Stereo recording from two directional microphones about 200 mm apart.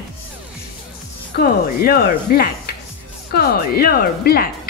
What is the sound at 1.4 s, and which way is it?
A woman's voice, 50° left (ahead or behind).